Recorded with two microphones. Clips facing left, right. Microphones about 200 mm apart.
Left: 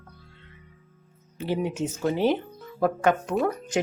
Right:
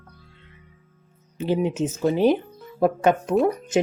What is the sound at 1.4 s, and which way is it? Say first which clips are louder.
Speech: right 4 dB; 20° right (ahead or behind).